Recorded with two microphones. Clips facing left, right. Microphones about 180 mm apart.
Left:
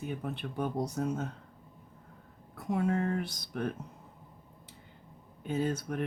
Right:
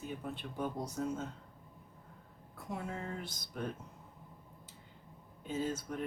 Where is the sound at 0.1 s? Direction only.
65° left (ahead or behind).